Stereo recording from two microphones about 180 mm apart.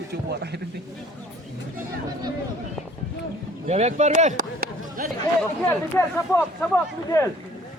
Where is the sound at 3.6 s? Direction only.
40° right (ahead or behind).